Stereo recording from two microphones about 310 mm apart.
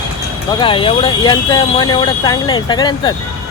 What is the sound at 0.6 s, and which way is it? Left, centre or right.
Speech, centre.